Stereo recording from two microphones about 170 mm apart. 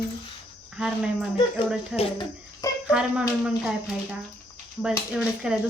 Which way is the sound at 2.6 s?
20° left (ahead or behind).